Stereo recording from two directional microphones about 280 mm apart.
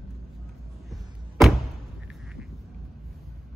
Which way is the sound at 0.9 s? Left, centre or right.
Centre.